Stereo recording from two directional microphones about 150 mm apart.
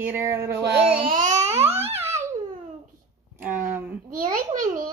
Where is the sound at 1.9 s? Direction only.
15° right (ahead or behind).